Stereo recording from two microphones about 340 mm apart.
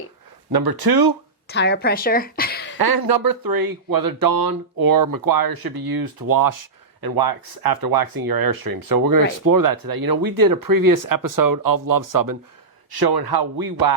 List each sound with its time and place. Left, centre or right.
0.5 s a man's voice: right
1.5 s a woman's voice: left
2.7 s speech: right
12.9 s a man's voice: right